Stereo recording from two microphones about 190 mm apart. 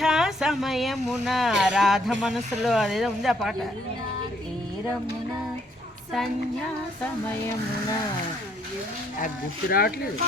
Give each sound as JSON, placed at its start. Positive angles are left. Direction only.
{"t": 0.0, "sound": "speech", "side_deg": 0}
{"t": 9.2, "sound": "speech", "side_deg": 55}